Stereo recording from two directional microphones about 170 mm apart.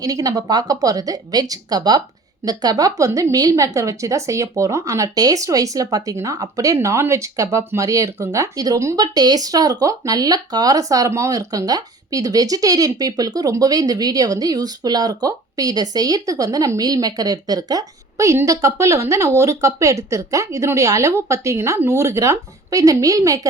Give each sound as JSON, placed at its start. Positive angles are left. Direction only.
{"t": 0.0, "sound": "a woman's voice", "side_deg": -20}